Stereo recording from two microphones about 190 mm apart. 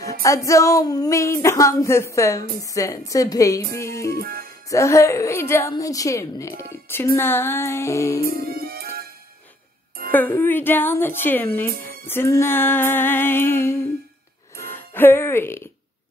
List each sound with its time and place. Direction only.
0.2 s a woman's voice: 15° left (ahead or behind)
4.2 s speech: 50° right (ahead or behind)
4.6 s a woman's voice: 15° left (ahead or behind)
8.2 s music: 50° right (ahead or behind)
10.4 s a woman's voice: 10° left (ahead or behind)
14.5 s music: 10° left (ahead or behind)